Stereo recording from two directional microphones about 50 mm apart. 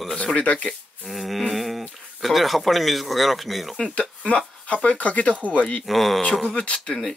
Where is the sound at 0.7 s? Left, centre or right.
Centre.